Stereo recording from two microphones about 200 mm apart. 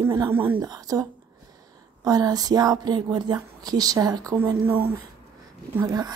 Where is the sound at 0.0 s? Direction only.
15° right (ahead or behind).